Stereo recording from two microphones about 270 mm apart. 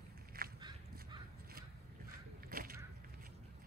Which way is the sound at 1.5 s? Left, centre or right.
Right.